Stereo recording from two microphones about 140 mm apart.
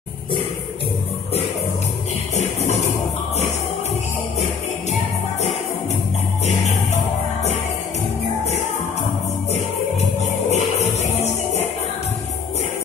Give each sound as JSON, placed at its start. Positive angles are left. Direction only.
{"t": 10.5, "sound": "music", "side_deg": 55}